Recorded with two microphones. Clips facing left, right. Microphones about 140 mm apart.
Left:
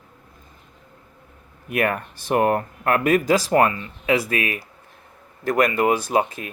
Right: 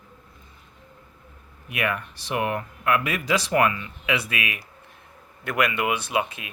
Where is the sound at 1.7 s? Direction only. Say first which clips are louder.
Left 5 dB; 45° left (ahead or behind).